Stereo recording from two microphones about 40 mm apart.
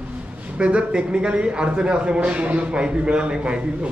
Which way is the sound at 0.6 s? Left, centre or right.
Right.